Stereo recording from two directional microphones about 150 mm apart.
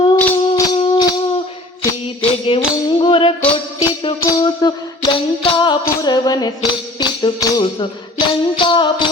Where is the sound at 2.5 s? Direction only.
35° left (ahead or behind).